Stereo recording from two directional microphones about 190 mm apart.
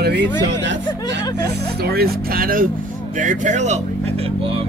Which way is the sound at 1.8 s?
55° right (ahead or behind).